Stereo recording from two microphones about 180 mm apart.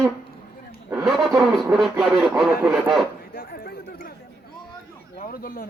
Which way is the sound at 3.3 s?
55° left (ahead or behind).